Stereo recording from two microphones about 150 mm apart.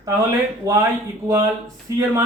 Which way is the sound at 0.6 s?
20° right (ahead or behind).